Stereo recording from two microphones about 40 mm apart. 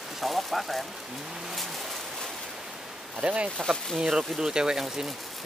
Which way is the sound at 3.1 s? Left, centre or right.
Right.